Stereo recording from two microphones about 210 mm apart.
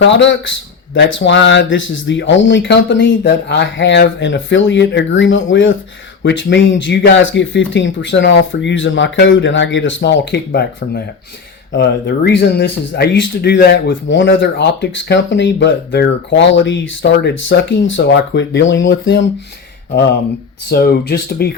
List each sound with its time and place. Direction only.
0.1 s speech: 60° left (ahead or behind)
20.7 s speech: 50° left (ahead or behind)